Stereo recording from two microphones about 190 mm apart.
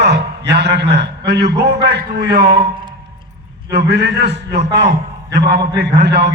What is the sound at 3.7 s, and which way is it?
Speech, 60° right (ahead or behind).